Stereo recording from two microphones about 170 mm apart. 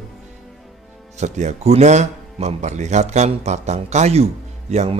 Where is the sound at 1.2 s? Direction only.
40° right (ahead or behind).